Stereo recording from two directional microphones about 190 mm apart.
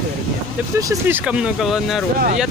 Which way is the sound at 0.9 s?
10° right (ahead or behind).